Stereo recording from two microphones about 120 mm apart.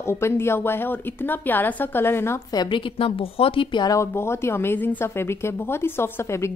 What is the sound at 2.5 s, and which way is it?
A woman's voice, 40° left (ahead or behind).